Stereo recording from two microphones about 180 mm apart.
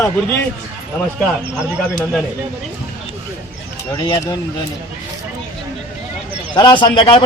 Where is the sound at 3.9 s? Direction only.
25° left (ahead or behind).